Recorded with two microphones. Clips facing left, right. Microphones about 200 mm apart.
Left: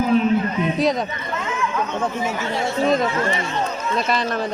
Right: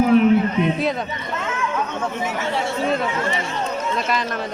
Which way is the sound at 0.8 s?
40° left (ahead or behind).